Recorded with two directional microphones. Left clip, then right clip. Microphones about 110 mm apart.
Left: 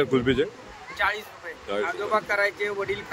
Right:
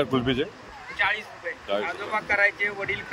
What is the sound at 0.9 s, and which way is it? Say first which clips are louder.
Speech: right 1 dB; 50° left (ahead or behind).